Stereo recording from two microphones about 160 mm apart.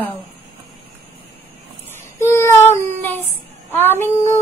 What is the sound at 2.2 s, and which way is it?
Child singing, 15° left (ahead or behind).